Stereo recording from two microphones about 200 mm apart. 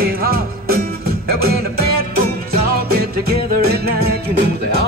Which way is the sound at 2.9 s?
50° right (ahead or behind).